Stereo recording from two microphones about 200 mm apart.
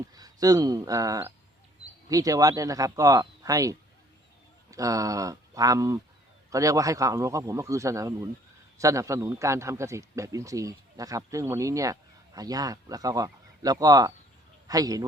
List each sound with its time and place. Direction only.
0.1 s a man's voice: 20° right (ahead or behind)